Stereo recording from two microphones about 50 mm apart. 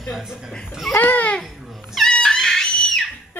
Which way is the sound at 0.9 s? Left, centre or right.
Left.